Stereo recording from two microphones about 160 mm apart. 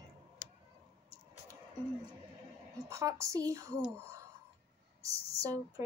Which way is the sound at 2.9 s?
20° right (ahead or behind).